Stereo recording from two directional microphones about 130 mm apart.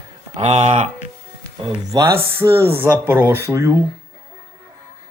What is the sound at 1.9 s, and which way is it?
Speech, 20° right (ahead or behind).